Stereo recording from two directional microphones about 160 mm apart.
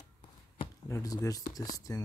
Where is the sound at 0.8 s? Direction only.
20° left (ahead or behind).